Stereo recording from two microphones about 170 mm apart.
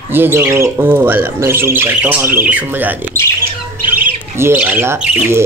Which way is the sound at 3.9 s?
10° right (ahead or behind).